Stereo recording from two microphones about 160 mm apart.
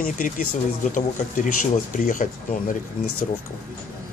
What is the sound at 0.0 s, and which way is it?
Speech, 55° left (ahead or behind).